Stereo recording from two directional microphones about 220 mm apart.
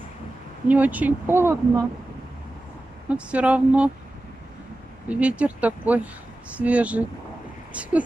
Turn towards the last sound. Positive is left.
turn(degrees=-5)  # may be behind; listen again after turning